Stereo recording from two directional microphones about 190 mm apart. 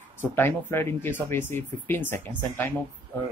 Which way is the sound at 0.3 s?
10° left (ahead or behind).